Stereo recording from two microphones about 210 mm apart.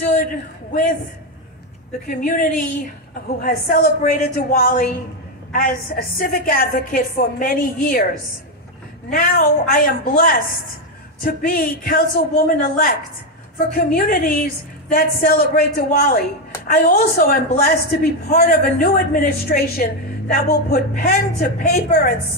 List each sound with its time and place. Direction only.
0.1 s a man's voice: 40° left (ahead or behind)
2.0 s a man's voice: 40° left (ahead or behind)
9.1 s a woman's voice: 45° left (ahead or behind)